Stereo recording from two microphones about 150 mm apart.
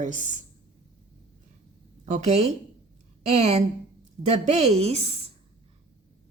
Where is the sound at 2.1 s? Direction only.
45° right (ahead or behind).